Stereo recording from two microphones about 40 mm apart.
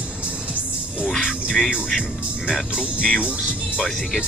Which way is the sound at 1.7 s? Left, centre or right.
Centre.